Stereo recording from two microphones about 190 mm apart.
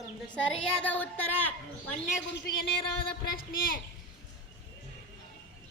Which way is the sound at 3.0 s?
50° left (ahead or behind).